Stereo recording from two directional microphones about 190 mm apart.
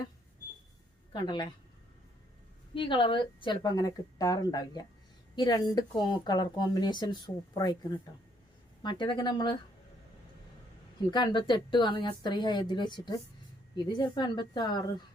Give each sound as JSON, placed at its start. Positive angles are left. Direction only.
{"t": 1.1, "sound": "speech", "side_deg": 25}
{"t": 2.7, "sound": "speech", "side_deg": 25}
{"t": 11.1, "sound": "speech", "side_deg": 25}